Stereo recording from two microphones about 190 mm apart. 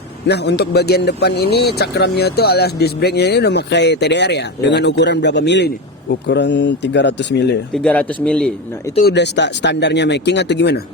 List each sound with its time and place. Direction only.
0.3 s speech: 60° left (ahead or behind)
7.7 s a man's voice: 5° left (ahead or behind)
9.0 s speech: 65° left (ahead or behind)